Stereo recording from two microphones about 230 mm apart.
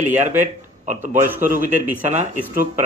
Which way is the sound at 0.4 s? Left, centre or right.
Right.